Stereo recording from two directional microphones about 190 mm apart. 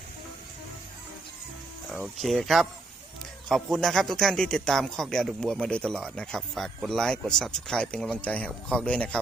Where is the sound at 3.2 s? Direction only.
Centre (ahead or behind).